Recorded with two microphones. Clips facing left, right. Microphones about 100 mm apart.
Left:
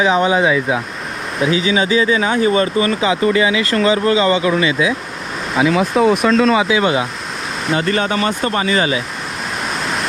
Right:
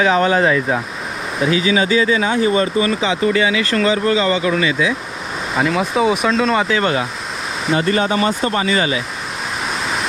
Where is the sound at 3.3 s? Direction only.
20° left (ahead or behind).